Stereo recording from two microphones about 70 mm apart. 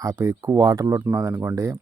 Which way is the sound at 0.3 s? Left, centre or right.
Right.